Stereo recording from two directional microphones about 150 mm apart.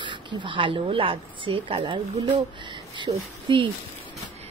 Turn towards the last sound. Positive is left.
turn(degrees=-30)  # may be behind; listen again after turning